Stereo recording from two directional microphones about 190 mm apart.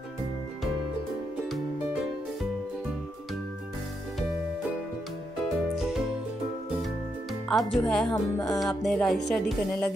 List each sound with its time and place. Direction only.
5.8 s music: 5° right (ahead or behind)
7.4 s speech: centre (ahead or behind)
8.1 s speech: 20° left (ahead or behind)
8.5 s a woman's voice: centre (ahead or behind)